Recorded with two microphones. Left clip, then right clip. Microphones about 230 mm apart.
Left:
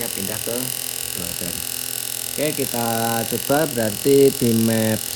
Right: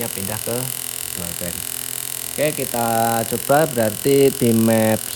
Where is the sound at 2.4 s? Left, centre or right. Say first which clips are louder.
Right 3 dB; right.